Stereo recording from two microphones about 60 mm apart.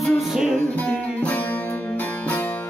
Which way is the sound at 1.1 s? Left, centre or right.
Left.